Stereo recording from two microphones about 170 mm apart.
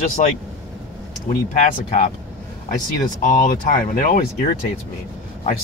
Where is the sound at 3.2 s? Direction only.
55° left (ahead or behind).